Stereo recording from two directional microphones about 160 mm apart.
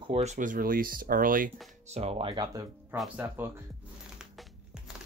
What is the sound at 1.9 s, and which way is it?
Speech, 40° right (ahead or behind).